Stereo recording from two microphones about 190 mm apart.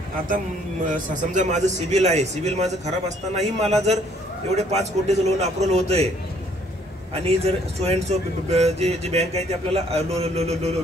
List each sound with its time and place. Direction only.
0.8 s speech: 40° right (ahead or behind)
7.2 s speech: 30° right (ahead or behind)